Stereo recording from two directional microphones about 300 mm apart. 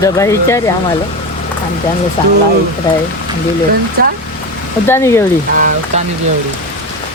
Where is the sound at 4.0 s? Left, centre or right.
Right.